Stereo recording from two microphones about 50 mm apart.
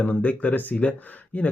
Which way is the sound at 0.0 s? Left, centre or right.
Left.